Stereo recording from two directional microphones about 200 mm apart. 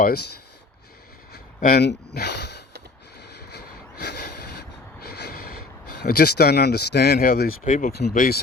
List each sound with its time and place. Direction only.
0.0 s speech: 55° left (ahead or behind)
1.8 s speech: 55° left (ahead or behind)
3.2 s a sound: 55° left (ahead or behind)